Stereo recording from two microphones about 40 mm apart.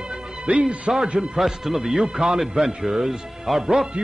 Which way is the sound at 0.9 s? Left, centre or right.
Centre.